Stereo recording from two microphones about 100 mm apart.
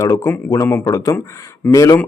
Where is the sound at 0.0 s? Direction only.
30° left (ahead or behind).